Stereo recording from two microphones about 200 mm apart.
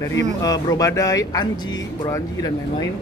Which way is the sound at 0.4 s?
20° left (ahead or behind).